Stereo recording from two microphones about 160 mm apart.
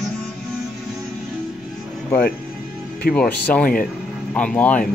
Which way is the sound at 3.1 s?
10° left (ahead or behind).